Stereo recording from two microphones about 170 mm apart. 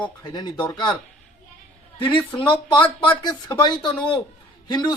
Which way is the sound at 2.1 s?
30° left (ahead or behind).